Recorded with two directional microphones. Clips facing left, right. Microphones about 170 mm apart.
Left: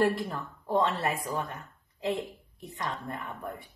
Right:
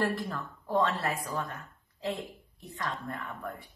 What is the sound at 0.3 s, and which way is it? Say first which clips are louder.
A woman's voice: left 2 dB; 20° left (ahead or behind).